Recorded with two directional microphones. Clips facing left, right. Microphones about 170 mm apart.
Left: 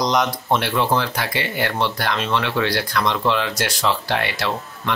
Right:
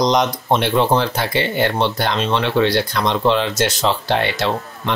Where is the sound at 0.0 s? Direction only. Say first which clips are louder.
Right 4 dB; 20° right (ahead or behind).